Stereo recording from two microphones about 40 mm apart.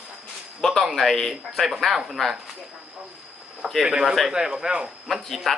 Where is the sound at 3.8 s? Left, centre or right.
Centre.